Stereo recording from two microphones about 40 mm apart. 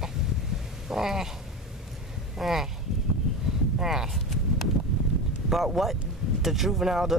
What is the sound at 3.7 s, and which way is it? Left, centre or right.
Speech, centre.